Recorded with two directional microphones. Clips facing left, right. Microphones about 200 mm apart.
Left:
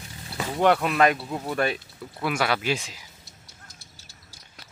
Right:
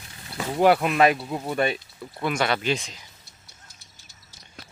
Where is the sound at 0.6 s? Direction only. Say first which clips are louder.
Right 2 dB; 5° right (ahead or behind).